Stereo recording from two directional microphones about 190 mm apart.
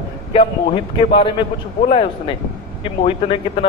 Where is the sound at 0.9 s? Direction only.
30° left (ahead or behind).